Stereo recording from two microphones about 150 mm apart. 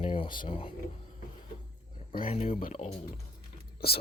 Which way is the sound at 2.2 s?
40° left (ahead or behind).